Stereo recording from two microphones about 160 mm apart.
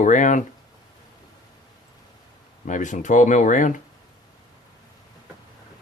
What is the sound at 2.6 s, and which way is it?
Speech, 50° left (ahead or behind).